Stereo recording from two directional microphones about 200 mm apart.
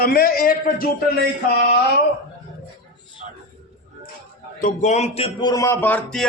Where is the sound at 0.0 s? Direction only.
45° left (ahead or behind).